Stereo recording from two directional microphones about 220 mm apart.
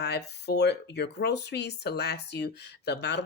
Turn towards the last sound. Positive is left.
turn(degrees=50)  # may be behind; listen again after turning